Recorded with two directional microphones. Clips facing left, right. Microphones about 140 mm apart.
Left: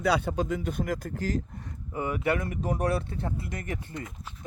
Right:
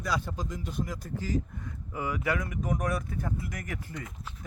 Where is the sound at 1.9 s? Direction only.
30° left (ahead or behind).